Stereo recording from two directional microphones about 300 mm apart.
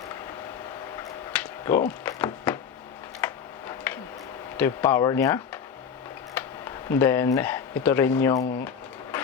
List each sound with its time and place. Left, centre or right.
1.3 s a sound: centre
3.2 s tick-tock: centre
4.5 s speech: centre